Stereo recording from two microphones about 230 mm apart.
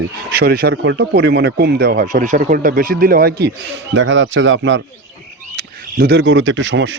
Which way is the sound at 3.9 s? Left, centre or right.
Right.